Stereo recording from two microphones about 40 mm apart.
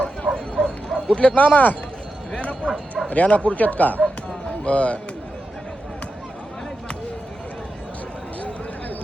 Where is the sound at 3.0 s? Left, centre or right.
Left.